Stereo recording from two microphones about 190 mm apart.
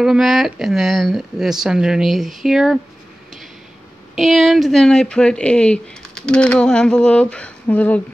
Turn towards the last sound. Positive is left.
turn(degrees=10)  # may be behind; listen again after turning